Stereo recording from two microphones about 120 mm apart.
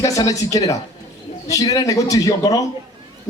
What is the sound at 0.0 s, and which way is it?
A man's voice, 30° left (ahead or behind).